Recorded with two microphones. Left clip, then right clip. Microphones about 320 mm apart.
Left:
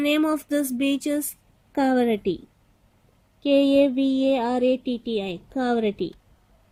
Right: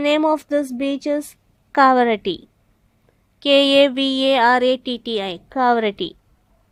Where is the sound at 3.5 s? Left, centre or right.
Right.